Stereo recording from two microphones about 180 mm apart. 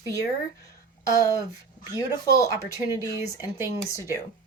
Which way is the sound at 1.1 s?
20° left (ahead or behind).